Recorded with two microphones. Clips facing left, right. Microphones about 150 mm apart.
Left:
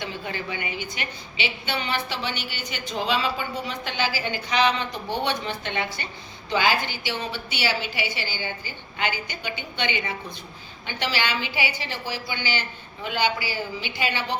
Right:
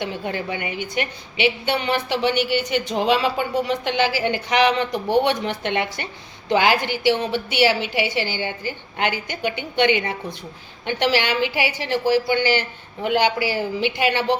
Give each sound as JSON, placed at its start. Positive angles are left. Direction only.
{"t": 0.0, "sound": "a woman's voice", "side_deg": -60}